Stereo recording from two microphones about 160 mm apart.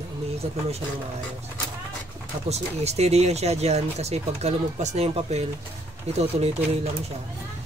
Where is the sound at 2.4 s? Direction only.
40° right (ahead or behind).